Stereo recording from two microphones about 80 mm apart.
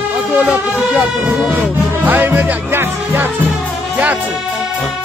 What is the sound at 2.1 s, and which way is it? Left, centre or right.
Music, right.